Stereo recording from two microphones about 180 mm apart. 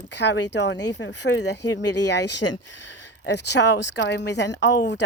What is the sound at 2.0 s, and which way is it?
Speech, 70° left (ahead or behind).